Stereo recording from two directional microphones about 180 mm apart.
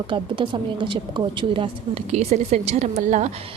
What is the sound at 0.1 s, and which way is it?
A woman's voice, 25° right (ahead or behind).